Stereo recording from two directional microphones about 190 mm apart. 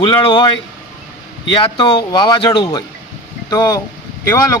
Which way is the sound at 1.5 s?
25° left (ahead or behind).